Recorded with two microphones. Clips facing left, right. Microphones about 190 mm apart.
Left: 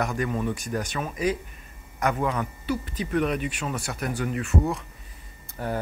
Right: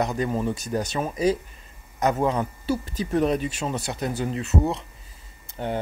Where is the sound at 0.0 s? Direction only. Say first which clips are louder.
Right 2 dB; 25° right (ahead or behind).